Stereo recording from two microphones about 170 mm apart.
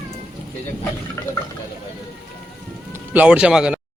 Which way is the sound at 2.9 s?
10° right (ahead or behind).